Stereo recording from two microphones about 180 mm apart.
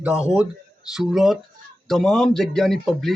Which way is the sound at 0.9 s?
Centre (ahead or behind).